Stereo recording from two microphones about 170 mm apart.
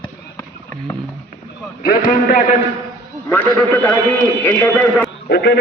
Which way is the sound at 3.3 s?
15° left (ahead or behind).